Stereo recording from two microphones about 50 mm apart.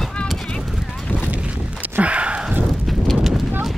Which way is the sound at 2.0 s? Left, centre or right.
Right.